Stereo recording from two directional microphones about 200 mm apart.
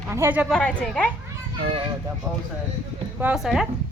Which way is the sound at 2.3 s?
5° left (ahead or behind).